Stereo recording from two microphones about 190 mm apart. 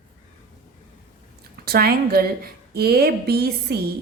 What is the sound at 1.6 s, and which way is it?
A woman's voice, 55° right (ahead or behind).